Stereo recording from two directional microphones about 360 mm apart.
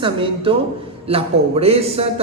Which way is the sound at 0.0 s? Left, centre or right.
Centre.